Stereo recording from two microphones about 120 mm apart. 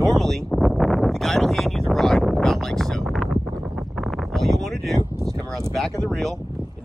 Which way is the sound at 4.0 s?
Centre (ahead or behind).